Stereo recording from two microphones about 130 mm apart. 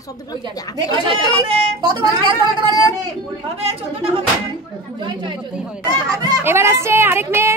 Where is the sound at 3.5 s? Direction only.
50° right (ahead or behind).